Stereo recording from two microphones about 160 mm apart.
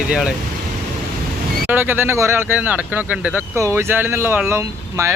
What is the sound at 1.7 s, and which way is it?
Speech, 10° right (ahead or behind).